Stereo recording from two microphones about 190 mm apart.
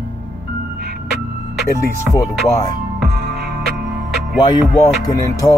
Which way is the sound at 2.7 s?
55° right (ahead or behind).